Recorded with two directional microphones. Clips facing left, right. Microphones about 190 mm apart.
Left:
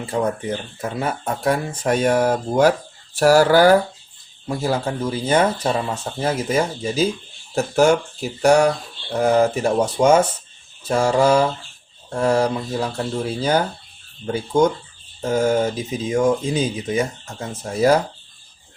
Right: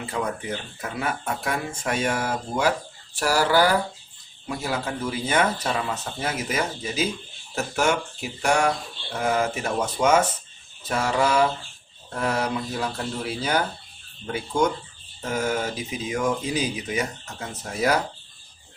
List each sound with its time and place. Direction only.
0.1 s speech: 30° left (ahead or behind)
4.4 s speech: 35° left (ahead or behind)
15.2 s speech: 30° left (ahead or behind)